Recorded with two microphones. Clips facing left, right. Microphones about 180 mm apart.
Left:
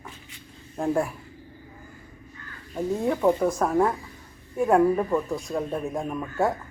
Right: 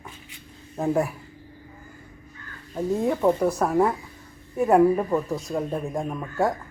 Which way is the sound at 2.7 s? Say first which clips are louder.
Right 1 dB; centre (ahead or behind).